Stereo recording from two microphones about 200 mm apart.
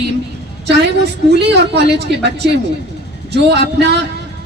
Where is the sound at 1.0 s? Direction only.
55° right (ahead or behind).